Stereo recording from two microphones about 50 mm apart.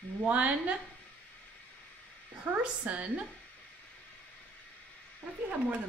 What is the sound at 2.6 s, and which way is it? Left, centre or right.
Speech, right.